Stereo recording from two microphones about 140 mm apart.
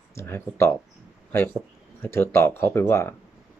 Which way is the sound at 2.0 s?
15° left (ahead or behind).